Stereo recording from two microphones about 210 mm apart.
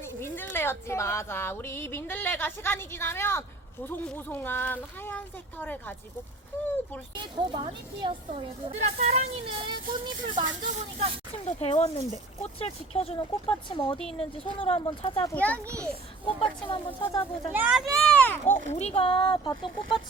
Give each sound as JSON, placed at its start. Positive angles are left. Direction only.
{"t": 0.0, "sound": "a sound", "side_deg": 10}
{"t": 0.5, "sound": "speech", "side_deg": 10}
{"t": 7.1, "sound": "speech", "side_deg": -20}
{"t": 10.7, "sound": "speech", "side_deg": -35}
{"t": 11.4, "sound": "speech", "side_deg": 30}
{"t": 15.3, "sound": "speech", "side_deg": 5}
{"t": 15.6, "sound": "a child's voice", "side_deg": -15}
{"t": 16.2, "sound": "speech", "side_deg": 25}
{"t": 17.5, "sound": "a child's voice", "side_deg": -10}
{"t": 18.0, "sound": "speech", "side_deg": 5}
{"t": 18.7, "sound": "speech", "side_deg": 30}